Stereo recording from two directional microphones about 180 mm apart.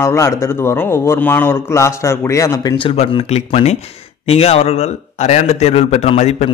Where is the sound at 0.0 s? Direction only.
15° left (ahead or behind).